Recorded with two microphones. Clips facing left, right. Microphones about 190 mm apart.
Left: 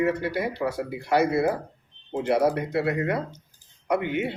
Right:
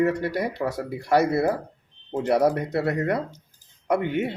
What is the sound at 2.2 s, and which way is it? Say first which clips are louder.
Speech: right 1 dB; 45° right (ahead or behind).